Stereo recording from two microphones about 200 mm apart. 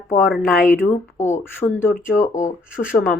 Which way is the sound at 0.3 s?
Centre (ahead or behind).